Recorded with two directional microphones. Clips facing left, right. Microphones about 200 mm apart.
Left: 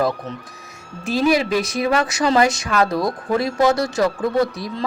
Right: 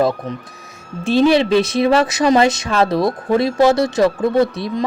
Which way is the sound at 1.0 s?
25° right (ahead or behind).